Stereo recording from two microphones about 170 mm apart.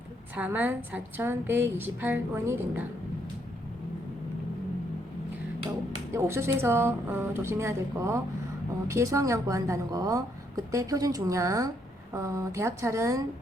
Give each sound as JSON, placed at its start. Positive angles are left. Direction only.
{"t": 0.3, "sound": "a woman's voice", "side_deg": -10}
{"t": 6.1, "sound": "a woman's voice", "side_deg": -15}